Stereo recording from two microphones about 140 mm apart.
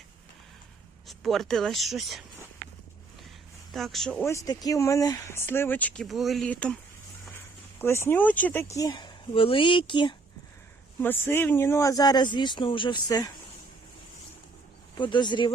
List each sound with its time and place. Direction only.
1.0 s speech: centre (ahead or behind)
3.7 s speech: centre (ahead or behind)
4.2 s speech: 20° left (ahead or behind)
7.8 s speech: 20° left (ahead or behind)
8.9 s speech: 35° left (ahead or behind)
11.0 s speech: 15° left (ahead or behind)
14.9 s speech: 35° left (ahead or behind)